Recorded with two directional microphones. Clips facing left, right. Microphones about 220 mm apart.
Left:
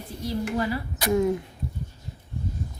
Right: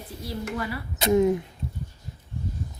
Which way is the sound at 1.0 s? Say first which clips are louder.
Right 3 dB; 20° right (ahead or behind).